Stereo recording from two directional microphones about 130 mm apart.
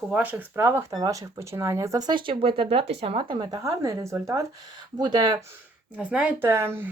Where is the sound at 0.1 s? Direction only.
10° right (ahead or behind).